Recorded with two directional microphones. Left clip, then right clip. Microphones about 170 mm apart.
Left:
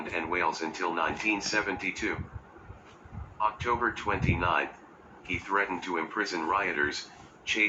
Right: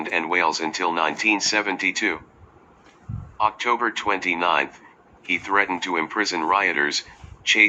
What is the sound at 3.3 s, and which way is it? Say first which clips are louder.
Speech: right 7 dB; 55° right (ahead or behind).